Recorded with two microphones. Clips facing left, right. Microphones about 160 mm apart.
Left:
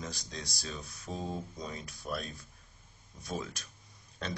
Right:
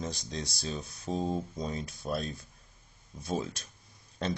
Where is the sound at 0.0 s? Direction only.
25° right (ahead or behind).